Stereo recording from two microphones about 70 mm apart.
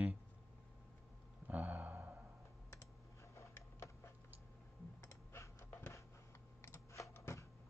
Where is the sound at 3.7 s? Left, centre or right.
Left.